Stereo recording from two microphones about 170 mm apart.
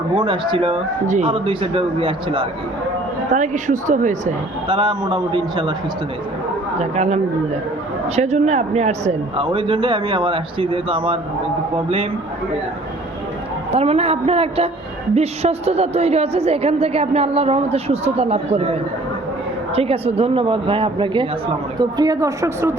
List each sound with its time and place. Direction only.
0.1 s a man's voice: 30° right (ahead or behind)
3.2 s a woman's voice: 45° right (ahead or behind)
4.7 s a man's voice: 25° right (ahead or behind)
6.7 s a woman's voice: 40° right (ahead or behind)
13.7 s a woman's voice: 35° right (ahead or behind); by 22.7 s 15° right (ahead or behind)